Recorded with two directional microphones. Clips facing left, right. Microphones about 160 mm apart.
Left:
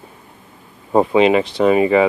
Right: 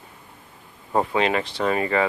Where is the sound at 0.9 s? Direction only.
20° left (ahead or behind).